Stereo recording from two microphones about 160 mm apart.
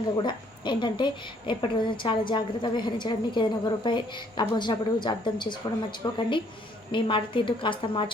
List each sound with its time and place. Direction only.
0.2 s a woman's voice: 30° left (ahead or behind)